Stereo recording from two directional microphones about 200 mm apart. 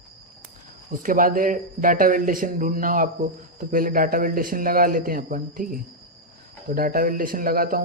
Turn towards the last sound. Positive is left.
turn(degrees=-45)  # may be behind; listen again after turning